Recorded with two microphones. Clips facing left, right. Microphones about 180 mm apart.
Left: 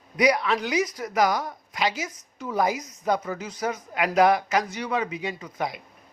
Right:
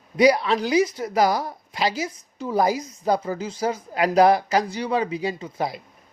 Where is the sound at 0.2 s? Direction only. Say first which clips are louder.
Right 4 dB; 30° right (ahead or behind).